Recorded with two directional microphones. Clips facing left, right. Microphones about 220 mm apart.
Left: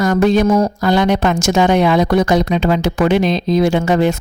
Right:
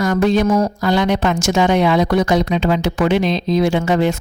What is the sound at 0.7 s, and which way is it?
A woman's voice, 45° left (ahead or behind).